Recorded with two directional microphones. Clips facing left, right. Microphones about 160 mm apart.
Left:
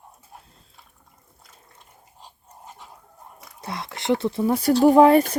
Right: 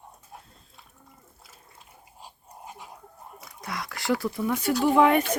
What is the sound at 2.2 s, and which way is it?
Dog, 10° right (ahead or behind).